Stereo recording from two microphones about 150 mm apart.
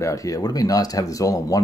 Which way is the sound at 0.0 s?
20° left (ahead or behind).